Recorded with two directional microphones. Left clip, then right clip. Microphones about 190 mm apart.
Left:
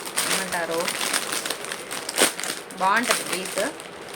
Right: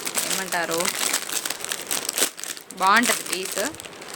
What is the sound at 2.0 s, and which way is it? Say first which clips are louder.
Crumpling: left 6 dB; 40° right (ahead or behind).